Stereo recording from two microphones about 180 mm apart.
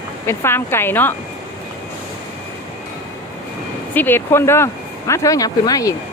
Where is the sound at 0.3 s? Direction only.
15° left (ahead or behind).